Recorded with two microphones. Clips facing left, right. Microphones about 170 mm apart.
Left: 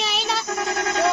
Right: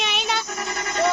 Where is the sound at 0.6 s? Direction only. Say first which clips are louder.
Left 3 dB; 90° left.